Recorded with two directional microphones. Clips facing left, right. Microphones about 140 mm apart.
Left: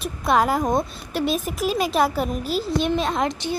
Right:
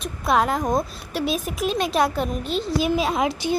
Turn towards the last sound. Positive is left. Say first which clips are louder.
# right 1 dB
turn(degrees=-10)  # may be behind; listen again after turning